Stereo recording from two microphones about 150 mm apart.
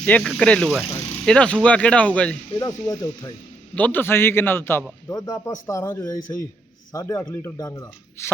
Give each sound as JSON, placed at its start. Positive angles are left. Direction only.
{"t": 0.0, "sound": "speech", "side_deg": 5}
{"t": 2.6, "sound": "speech", "side_deg": 25}
{"t": 3.8, "sound": "speech", "side_deg": 10}